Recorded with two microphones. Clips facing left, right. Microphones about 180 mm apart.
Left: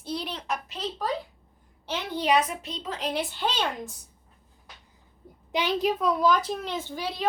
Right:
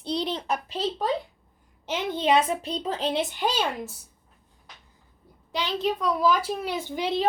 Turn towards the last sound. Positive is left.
turn(degrees=-20)  # may be behind; listen again after turning